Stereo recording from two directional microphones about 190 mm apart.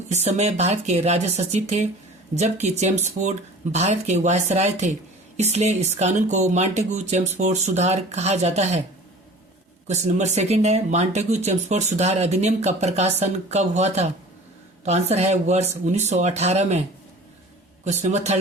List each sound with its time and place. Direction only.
0.3 s speech: 35° right (ahead or behind)
9.8 s speech: 35° right (ahead or behind)
17.8 s speech: 35° right (ahead or behind)